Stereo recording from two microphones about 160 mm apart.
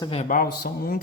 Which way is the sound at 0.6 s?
70° left (ahead or behind).